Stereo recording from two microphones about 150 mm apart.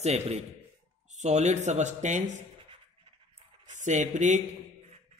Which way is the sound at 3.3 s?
50° right (ahead or behind).